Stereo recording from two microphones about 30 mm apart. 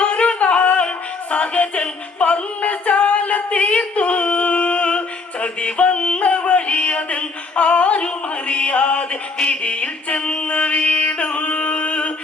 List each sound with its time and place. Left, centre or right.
0.0 s a sound: left
0.5 s music: left
10.4 s mantra: left
11.4 s singing: left